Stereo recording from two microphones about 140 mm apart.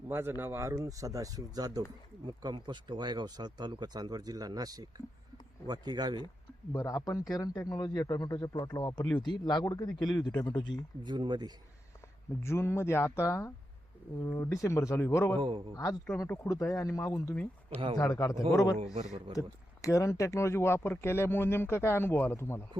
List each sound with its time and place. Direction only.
0.1 s speech: 15° right (ahead or behind)
6.7 s a man's voice: 25° left (ahead or behind)
11.0 s speech: 35° right (ahead or behind)
12.4 s a man's voice: 20° left (ahead or behind)
15.4 s speech: 35° right (ahead or behind)
15.7 s a man's voice: 25° left (ahead or behind)
17.3 s speech: 10° left (ahead or behind)
17.9 s a man's voice: 25° left (ahead or behind)